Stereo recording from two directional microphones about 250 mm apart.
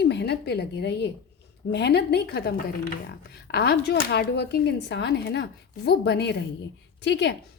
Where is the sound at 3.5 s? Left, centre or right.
Left.